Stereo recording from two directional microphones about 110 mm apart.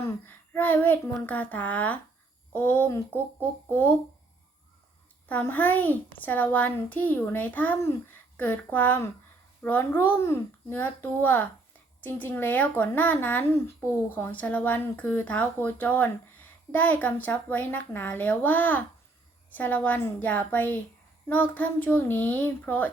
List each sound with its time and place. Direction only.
0.0 s a sound: 20° left (ahead or behind)
2.5 s speech: 15° left (ahead or behind)
5.3 s speech: 15° left (ahead or behind)